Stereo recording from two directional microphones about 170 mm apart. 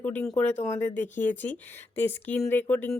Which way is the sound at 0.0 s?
10° left (ahead or behind).